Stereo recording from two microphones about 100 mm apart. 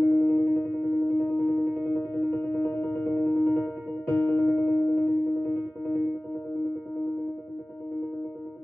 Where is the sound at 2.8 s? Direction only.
15° left (ahead or behind).